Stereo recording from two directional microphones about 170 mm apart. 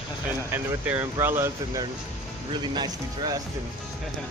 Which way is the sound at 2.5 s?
25° right (ahead or behind).